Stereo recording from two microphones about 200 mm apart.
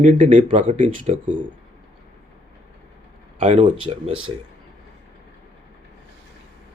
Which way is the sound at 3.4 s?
30° right (ahead or behind).